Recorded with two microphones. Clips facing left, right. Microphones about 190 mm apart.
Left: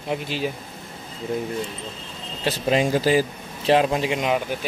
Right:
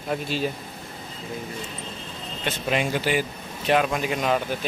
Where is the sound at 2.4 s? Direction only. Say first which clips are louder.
Left 5 dB; 35° left (ahead or behind).